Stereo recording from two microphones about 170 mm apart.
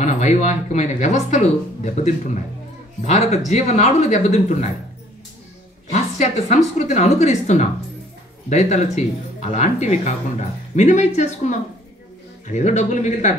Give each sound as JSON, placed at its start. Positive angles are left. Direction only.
{"t": 0.0, "sound": "speech", "side_deg": 45}
{"t": 5.9, "sound": "speech", "side_deg": 45}